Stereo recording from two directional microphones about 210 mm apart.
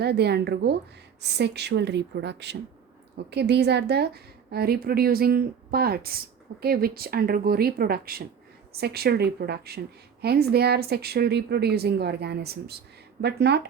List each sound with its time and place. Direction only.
0.0 s a woman's voice: 50° right (ahead or behind)